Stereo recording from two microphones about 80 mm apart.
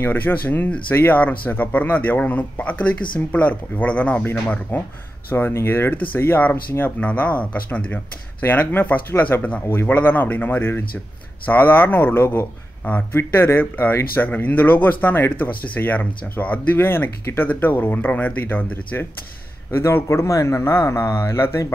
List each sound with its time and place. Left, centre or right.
0.0 s a man's voice: left
7.0 s a man's voice: centre
19.7 s speech: left